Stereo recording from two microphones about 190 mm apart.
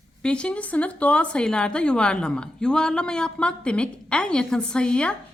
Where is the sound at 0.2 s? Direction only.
5° left (ahead or behind).